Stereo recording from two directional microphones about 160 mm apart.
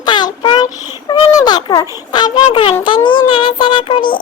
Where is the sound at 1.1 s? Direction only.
25° left (ahead or behind).